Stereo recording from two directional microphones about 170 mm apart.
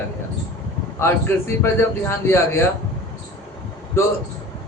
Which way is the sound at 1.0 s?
15° left (ahead or behind).